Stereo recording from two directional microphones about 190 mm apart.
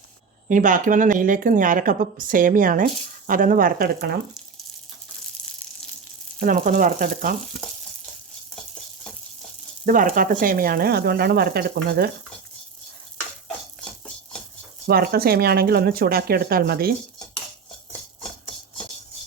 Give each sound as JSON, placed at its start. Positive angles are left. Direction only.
{"t": 0.4, "sound": "speech", "side_deg": -45}
{"t": 6.4, "sound": "speech", "side_deg": -45}
{"t": 9.8, "sound": "speech", "side_deg": -45}
{"t": 14.8, "sound": "speech", "side_deg": -55}